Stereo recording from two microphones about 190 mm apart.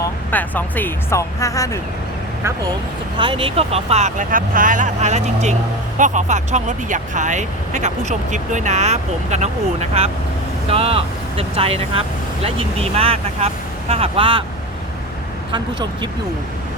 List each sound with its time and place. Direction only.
0.0 s speech: 10° left (ahead or behind)
3.2 s speech: 25° right (ahead or behind)
15.5 s speech: 25° right (ahead or behind)